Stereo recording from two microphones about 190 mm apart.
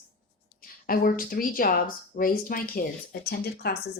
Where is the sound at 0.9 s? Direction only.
50° left (ahead or behind).